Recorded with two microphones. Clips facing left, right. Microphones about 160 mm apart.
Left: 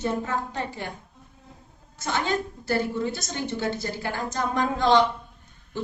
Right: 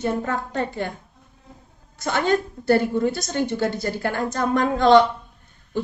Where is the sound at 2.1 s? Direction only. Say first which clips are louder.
Right 6 dB; 55° right (ahead or behind).